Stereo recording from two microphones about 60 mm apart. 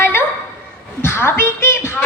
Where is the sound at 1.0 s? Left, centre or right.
Left.